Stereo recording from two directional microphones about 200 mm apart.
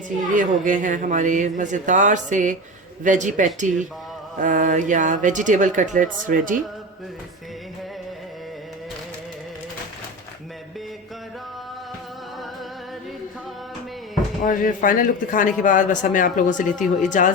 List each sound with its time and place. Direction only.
0.3 s speech: 40° right (ahead or behind)
14.4 s speech: 40° left (ahead or behind)